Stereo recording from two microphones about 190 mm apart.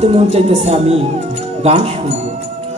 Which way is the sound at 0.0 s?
35° right (ahead or behind).